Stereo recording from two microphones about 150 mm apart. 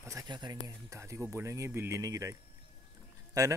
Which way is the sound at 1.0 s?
15° right (ahead or behind).